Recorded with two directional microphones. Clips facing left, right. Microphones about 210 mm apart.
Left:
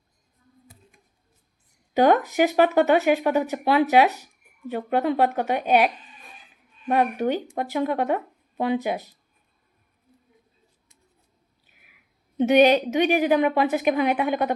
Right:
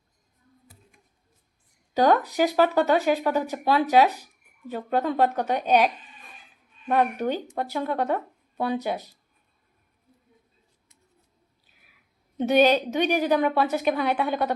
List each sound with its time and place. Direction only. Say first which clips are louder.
1.9 s a sound: left 2 dB; 15° left (ahead or behind)
2.6 s speech: left 2 dB; 15° left (ahead or behind)
12.4 s speech: left 3 dB; 15° left (ahead or behind)